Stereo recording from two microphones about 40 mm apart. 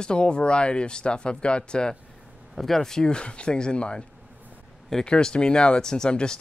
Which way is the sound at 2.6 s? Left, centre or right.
Centre.